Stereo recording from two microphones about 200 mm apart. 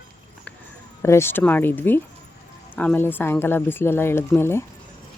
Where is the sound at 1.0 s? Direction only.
10° left (ahead or behind).